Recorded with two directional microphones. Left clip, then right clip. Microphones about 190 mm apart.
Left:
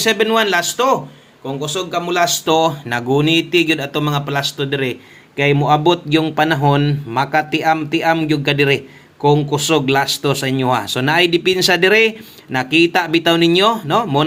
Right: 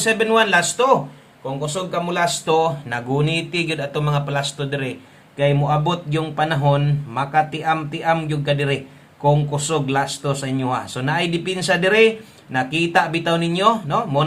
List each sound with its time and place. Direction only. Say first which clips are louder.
0.0 s speech: left 2 dB; 30° left (ahead or behind)